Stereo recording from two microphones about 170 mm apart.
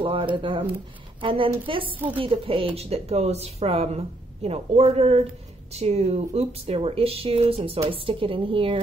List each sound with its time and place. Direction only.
0.0 s a woman's voice: 30° right (ahead or behind)